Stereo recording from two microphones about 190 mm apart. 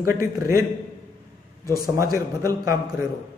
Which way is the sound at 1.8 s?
20° right (ahead or behind).